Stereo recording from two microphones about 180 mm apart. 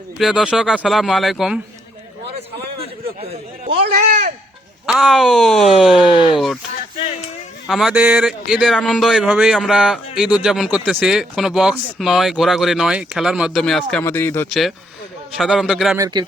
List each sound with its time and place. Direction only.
0.2 s speech: 5° right (ahead or behind)
3.8 s a sound: 50° right (ahead or behind)
4.9 s speech: centre (ahead or behind)
6.1 s speech: 25° left (ahead or behind)
6.3 s speech: centre (ahead or behind)
7.7 s speech: centre (ahead or behind)
15.4 s speech: centre (ahead or behind)
16.0 s speech: 20° right (ahead or behind)